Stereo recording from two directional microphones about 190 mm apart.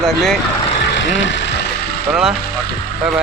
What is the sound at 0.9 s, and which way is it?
Vehicle, 75° left (ahead or behind).